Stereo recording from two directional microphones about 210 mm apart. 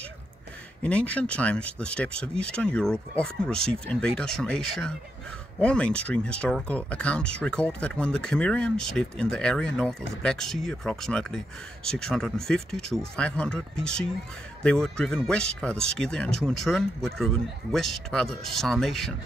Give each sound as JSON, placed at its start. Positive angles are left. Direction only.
{"t": 0.8, "sound": "speech", "side_deg": 5}